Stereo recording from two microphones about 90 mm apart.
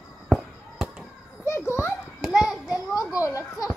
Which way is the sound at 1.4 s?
30° left (ahead or behind).